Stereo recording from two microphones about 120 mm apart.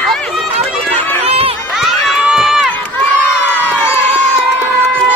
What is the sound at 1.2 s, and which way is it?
Run, 55° right (ahead or behind).